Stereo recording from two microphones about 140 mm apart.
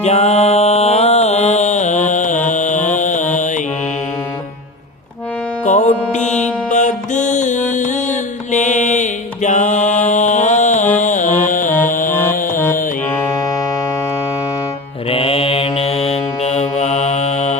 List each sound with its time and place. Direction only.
0.0 s mantra: 50° left (ahead or behind)
5.6 s music: 60° left (ahead or behind); by 12.5 s 80° left
15.1 s mantra: 40° left (ahead or behind)